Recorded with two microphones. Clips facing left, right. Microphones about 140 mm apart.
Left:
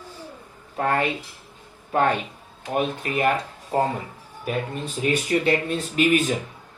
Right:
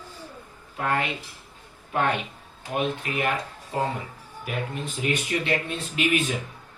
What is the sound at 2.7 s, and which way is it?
Speech, 40° left (ahead or behind).